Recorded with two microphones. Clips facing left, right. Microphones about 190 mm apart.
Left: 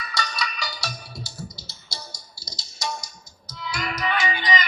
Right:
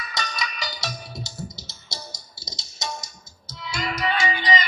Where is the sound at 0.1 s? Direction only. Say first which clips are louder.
Left 2 dB; 20° right (ahead or behind).